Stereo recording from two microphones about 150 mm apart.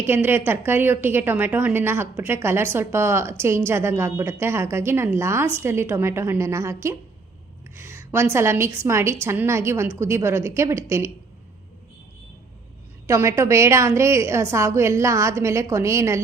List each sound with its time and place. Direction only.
0.0 s a woman's voice: 15° right (ahead or behind)
13.1 s a woman's voice: 20° right (ahead or behind)